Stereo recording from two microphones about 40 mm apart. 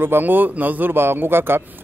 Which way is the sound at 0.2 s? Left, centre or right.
Right.